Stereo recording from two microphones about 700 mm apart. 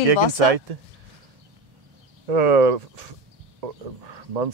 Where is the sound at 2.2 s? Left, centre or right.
Right.